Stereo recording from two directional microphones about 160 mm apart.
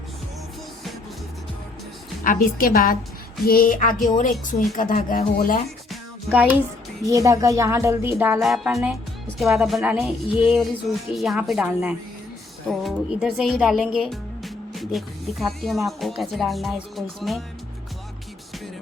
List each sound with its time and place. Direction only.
2.2 s speech: 60° left (ahead or behind)
5.9 s music: 5° right (ahead or behind)
7.0 s speech: 20° right (ahead or behind)
8.4 s speech: 5° right (ahead or behind)